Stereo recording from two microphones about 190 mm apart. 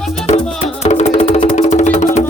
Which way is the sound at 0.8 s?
35° left (ahead or behind).